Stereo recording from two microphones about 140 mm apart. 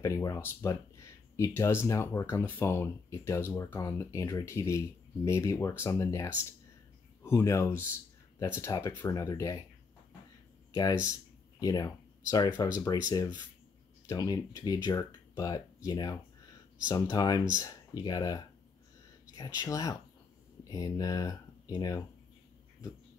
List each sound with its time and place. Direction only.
0.0 s speech: 25° left (ahead or behind)
10.7 s speech: 25° left (ahead or behind)